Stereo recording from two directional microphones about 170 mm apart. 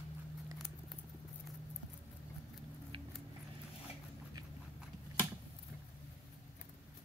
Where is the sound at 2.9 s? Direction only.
30° right (ahead or behind).